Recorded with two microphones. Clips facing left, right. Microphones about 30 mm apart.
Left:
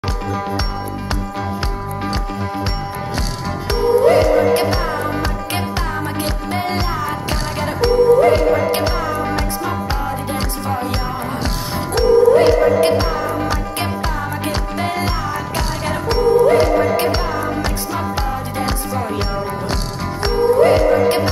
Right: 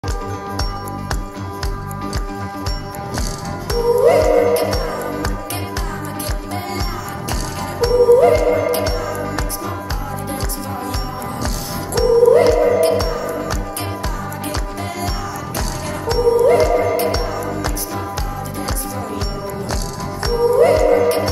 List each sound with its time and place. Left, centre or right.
3.6 s music: left
11.9 s music: left
20.2 s music: left